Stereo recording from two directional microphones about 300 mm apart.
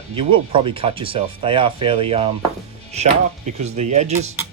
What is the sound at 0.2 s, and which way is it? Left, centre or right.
Speech, centre.